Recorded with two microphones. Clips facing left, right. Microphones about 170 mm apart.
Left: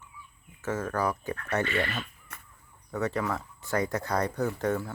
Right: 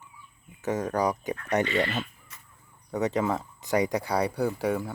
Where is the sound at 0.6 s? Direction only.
15° right (ahead or behind).